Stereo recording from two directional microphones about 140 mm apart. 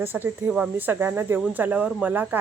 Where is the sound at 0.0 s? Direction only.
15° right (ahead or behind).